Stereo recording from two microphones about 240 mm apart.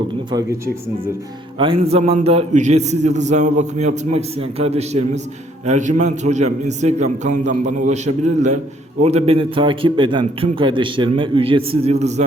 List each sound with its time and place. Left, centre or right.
1.5 s a man's voice: right